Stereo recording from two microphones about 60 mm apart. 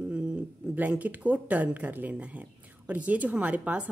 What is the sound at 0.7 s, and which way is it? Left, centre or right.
A woman's voice, right.